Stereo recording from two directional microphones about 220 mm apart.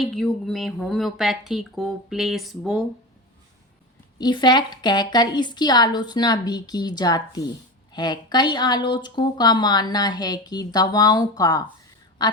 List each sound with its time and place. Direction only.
0.0 s speech: centre (ahead or behind)
4.2 s speech: 20° left (ahead or behind)